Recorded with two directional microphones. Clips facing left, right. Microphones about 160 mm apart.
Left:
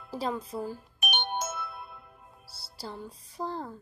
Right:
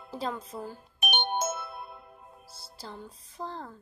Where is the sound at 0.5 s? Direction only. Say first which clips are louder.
Left 4 dB; 10° left (ahead or behind).